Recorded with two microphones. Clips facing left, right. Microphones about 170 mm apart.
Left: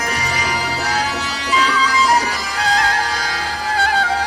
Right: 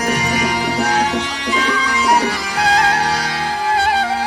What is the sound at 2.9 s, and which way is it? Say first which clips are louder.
Music: right 3 dB; 30° right (ahead or behind).